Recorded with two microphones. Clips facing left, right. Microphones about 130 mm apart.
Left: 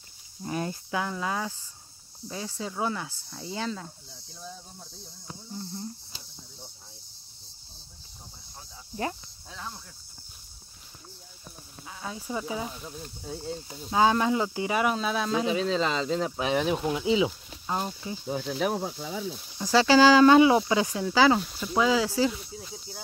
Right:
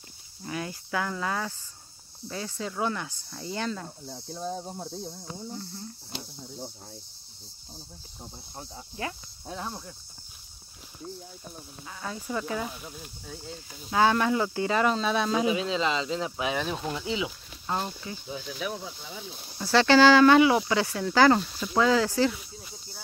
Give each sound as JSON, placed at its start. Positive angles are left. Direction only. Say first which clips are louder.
{"t": 0.4, "sound": "speech", "louder": "left 3 dB", "side_deg": 35}
{"t": 0.8, "sound": "speech", "louder": "even", "side_deg": 20}
{"t": 4.1, "sound": "cricket", "louder": "right 10 dB", "side_deg": -70}
{"t": 9.5, "sound": "speech", "louder": "right 5 dB", "side_deg": -35}
{"t": 11.9, "sound": "speech", "louder": "right 1 dB", "side_deg": 5}
{"t": 12.7, "sound": "speech", "louder": "left 2 dB", "side_deg": -10}
{"t": 13.2, "sound": "speech", "louder": "left 7 dB", "side_deg": 25}
{"t": 15.5, "sound": "speech", "louder": "left 1 dB", "side_deg": 40}
{"t": 16.5, "sound": "speech", "louder": "left 5 dB", "side_deg": 10}
{"t": 17.6, "sound": "speech", "louder": "even", "side_deg": 10}
{"t": 18.2, "sound": "speech", "louder": "left 7 dB", "side_deg": 65}
{"t": 19.6, "sound": "speech", "louder": "even", "side_deg": 10}
{"t": 20.2, "sound": "speech", "louder": "left 1 dB", "side_deg": 25}
{"t": 21.1, "sound": "speech", "louder": "right 2 dB", "side_deg": 5}